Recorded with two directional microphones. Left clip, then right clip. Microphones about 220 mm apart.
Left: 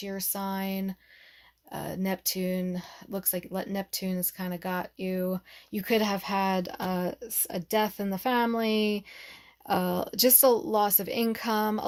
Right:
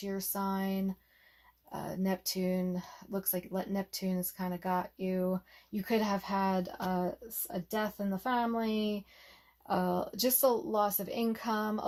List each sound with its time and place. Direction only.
0.0 s speech: 35° left (ahead or behind)